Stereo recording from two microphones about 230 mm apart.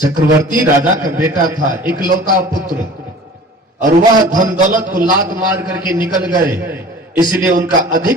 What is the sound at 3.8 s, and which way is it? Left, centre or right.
A man's voice, right.